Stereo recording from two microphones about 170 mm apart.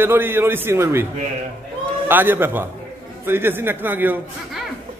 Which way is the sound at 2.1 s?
10° right (ahead or behind).